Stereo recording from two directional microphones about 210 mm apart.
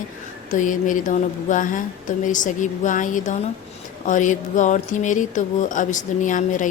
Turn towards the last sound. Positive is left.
turn(degrees=35)  # may be behind; listen again after turning